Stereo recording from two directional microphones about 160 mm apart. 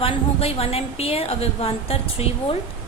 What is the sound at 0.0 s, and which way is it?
A woman's voice, 40° left (ahead or behind).